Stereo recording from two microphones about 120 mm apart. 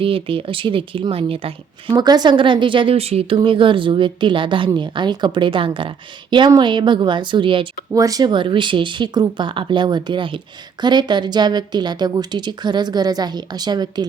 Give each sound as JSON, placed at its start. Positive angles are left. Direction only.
{"t": 0.0, "sound": "speech", "side_deg": -50}
{"t": 2.0, "sound": "speech", "side_deg": -35}
{"t": 7.9, "sound": "speech", "side_deg": -30}